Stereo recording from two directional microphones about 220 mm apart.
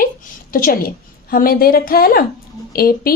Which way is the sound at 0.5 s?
40° left (ahead or behind).